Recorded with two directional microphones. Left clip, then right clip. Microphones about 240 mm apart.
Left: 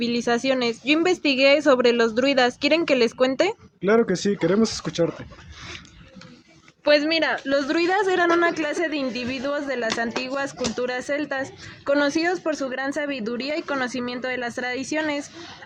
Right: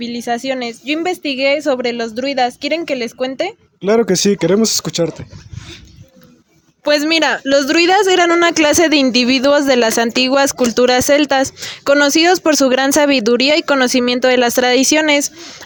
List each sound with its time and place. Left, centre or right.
0.0 s a woman's voice: centre
3.8 s speech: right
6.8 s speech: right